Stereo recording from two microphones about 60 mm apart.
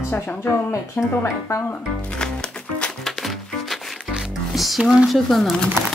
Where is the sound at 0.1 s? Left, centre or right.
Left.